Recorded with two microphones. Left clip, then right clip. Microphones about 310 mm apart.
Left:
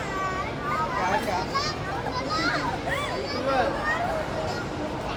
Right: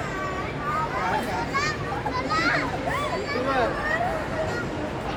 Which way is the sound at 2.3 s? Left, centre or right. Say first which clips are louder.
Right 3 dB; centre.